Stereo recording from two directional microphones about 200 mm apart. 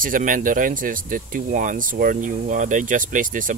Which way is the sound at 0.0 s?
40° right (ahead or behind).